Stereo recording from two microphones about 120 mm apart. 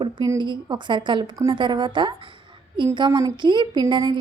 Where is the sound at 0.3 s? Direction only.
40° right (ahead or behind).